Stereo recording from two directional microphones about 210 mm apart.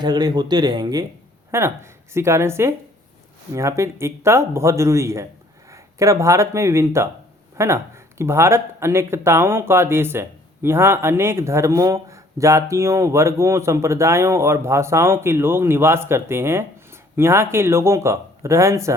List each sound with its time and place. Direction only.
0.0 s speech: 20° right (ahead or behind)